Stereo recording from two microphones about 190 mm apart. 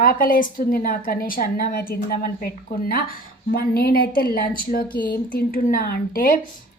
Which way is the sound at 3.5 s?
55° left (ahead or behind).